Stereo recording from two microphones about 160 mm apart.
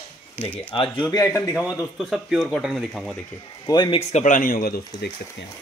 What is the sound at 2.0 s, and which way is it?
Speech, centre (ahead or behind).